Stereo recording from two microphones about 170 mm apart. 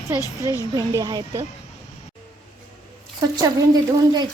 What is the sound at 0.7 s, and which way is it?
Speech, 25° right (ahead or behind).